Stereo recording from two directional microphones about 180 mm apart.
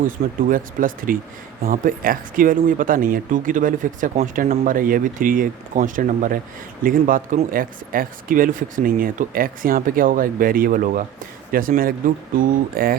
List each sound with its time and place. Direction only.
0.4 s speech: 50° right (ahead or behind)